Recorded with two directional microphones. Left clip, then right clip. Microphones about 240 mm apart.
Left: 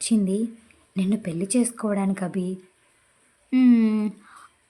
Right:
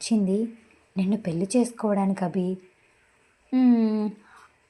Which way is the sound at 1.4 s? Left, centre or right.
Left.